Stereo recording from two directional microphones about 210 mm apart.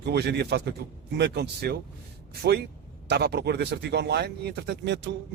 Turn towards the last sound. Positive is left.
turn(degrees=-55)  # may be behind; listen again after turning